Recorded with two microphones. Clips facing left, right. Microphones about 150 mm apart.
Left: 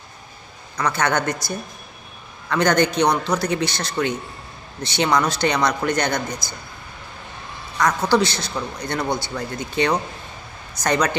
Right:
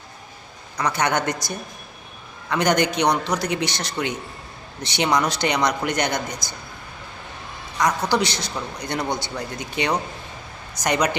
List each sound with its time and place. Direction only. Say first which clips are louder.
0.8 s a man's voice: left 1 dB; 15° right (ahead or behind)
8.1 s a man's voice: left 3 dB; 15° right (ahead or behind)